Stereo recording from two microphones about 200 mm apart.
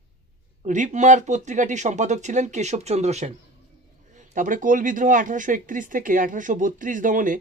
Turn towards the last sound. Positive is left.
turn(degrees=-40)  # may be behind; listen again after turning